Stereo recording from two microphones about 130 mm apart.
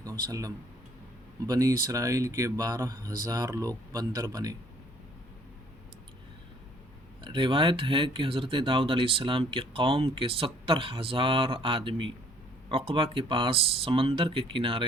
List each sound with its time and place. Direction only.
0.0 s speech: 25° right (ahead or behind)
7.2 s speech: 40° right (ahead or behind)